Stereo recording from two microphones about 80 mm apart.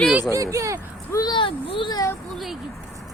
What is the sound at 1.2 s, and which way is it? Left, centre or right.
Speech, left.